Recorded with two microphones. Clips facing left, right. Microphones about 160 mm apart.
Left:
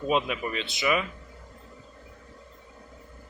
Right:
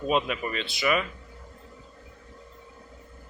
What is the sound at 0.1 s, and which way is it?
Speech, 15° left (ahead or behind).